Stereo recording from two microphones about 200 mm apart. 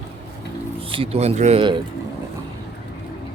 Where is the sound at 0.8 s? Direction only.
25° right (ahead or behind).